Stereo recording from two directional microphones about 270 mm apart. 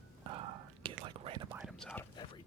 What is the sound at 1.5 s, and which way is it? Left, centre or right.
Whispering, centre.